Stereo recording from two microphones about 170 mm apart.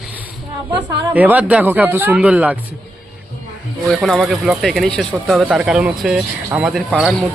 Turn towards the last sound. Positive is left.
turn(degrees=-5)  # may be behind; listen again after turning